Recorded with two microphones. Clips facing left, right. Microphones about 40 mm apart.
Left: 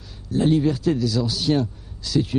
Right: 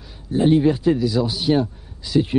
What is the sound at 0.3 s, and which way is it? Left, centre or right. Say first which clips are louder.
A man's voice: right 3 dB; centre.